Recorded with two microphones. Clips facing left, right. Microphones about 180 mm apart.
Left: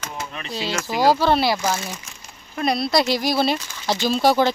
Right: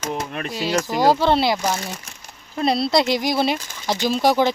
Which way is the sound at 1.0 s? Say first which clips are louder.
Even; 20° right (ahead or behind).